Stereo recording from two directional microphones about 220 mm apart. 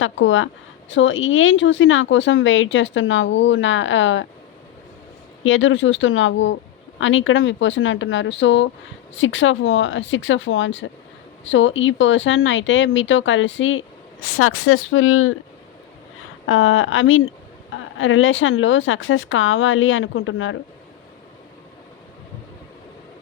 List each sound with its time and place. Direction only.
0.0 s a woman's voice: 60° left (ahead or behind)
5.4 s a woman's voice: 60° left (ahead or behind)
16.5 s a woman's voice: 65° left (ahead or behind)